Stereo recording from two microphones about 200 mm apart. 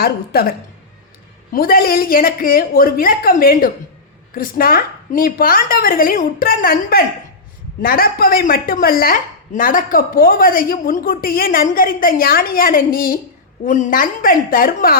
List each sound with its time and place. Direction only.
0.0 s speech: 50° left (ahead or behind)
1.5 s speech: 50° left (ahead or behind)